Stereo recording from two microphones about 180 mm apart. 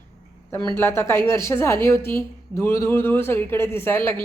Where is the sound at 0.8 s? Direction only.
15° left (ahead or behind).